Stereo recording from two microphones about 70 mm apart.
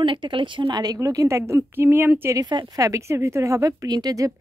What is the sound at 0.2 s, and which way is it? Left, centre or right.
Speech, right.